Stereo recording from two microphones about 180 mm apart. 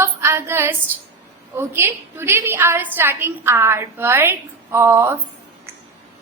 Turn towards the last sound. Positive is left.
turn(degrees=-15)  # may be behind; listen again after turning